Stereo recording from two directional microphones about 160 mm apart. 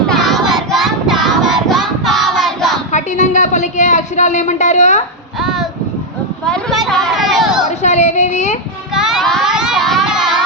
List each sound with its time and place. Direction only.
0.1 s child singing: centre (ahead or behind)
2.9 s a woman's voice: 50° left (ahead or behind)
5.4 s a sound: centre (ahead or behind)
7.8 s a woman's voice: 45° left (ahead or behind)
8.9 s child singing: 5° right (ahead or behind)